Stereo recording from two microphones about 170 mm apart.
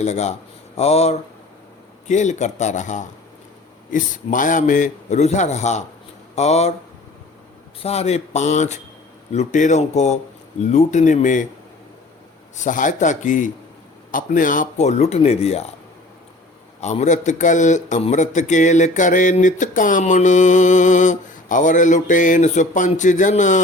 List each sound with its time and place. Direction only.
0.0 s a man's voice: 40° left (ahead or behind)
7.8 s a man's voice: 40° left (ahead or behind)
12.5 s a man's voice: 50° left (ahead or behind)
16.8 s a man's voice: 40° left (ahead or behind)